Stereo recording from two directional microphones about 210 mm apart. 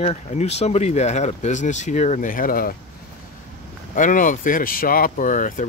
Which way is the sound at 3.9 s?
40° left (ahead or behind).